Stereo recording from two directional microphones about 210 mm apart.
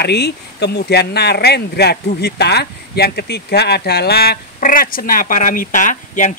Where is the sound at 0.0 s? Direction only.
50° left (ahead or behind).